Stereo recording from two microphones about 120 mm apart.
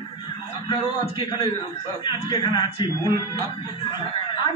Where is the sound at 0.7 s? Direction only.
40° left (ahead or behind).